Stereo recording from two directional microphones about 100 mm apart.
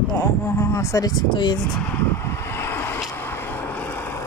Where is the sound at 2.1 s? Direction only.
25° left (ahead or behind).